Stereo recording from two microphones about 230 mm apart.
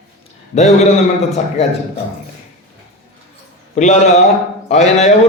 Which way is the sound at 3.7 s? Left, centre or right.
Left.